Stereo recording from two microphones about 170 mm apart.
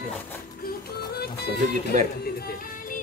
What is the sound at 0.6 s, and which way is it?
Music, 65° left (ahead or behind).